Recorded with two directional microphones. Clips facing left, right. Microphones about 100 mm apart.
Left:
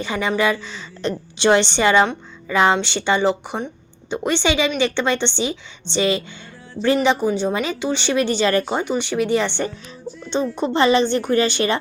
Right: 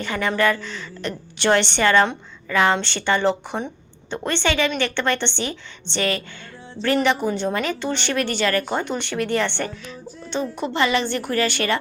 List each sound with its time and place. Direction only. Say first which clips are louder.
0.0 s a woman's voice: left 1 dB; 15° left (ahead or behind)